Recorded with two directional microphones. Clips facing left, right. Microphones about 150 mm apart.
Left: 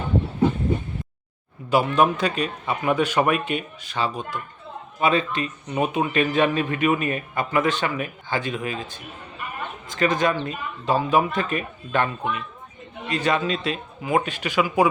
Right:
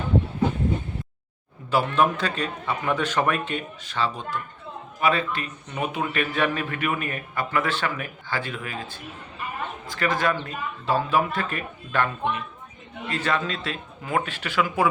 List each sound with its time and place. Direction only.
1.7 s a man's voice: 15° left (ahead or behind)
13.1 s speech: 15° left (ahead or behind)